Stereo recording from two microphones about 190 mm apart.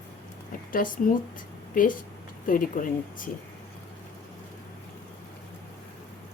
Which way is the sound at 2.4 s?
45° left (ahead or behind).